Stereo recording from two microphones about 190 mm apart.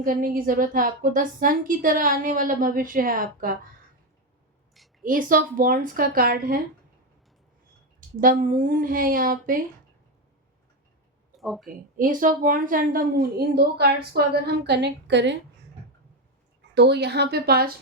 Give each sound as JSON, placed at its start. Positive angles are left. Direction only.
{"t": 0.0, "sound": "a woman's voice", "side_deg": -50}
{"t": 5.0, "sound": "a woman's voice", "side_deg": -45}
{"t": 8.2, "sound": "a woman's voice", "side_deg": -45}
{"t": 11.3, "sound": "speech", "side_deg": 0}
{"t": 11.9, "sound": "a woman's voice", "side_deg": -45}
{"t": 16.7, "sound": "a woman's voice", "side_deg": -60}